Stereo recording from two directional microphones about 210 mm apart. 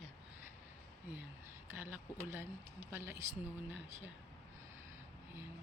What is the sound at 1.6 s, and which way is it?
Speech, 10° right (ahead or behind).